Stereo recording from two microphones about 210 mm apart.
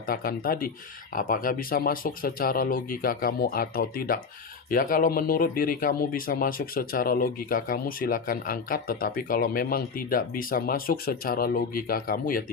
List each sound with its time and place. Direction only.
0.0 s speech: 45° left (ahead or behind)